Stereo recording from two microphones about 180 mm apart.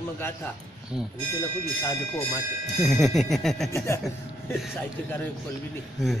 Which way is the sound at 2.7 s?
Centre (ahead or behind).